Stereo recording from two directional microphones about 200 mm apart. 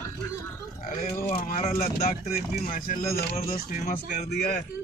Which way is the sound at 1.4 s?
40° left (ahead or behind).